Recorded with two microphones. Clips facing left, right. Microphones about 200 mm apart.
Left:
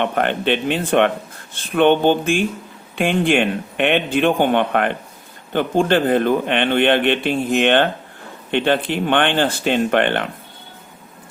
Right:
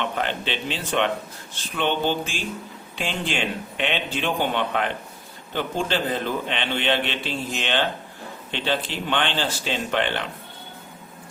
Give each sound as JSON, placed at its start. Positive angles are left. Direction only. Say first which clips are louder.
{"t": 0.0, "sound": "a man's voice", "louder": "left 7 dB", "side_deg": 55}